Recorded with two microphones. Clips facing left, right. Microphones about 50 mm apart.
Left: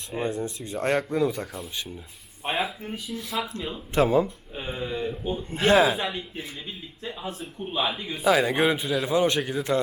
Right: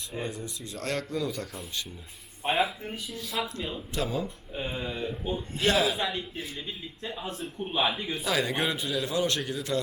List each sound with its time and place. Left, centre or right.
0.2 s speech: left
2.4 s a man's voice: centre
3.9 s speech: left
4.5 s a man's voice: centre
5.5 s speech: left
5.7 s a man's voice: centre
8.2 s speech: centre